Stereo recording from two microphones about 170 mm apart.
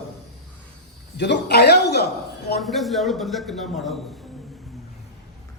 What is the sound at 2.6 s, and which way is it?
Speech, centre (ahead or behind).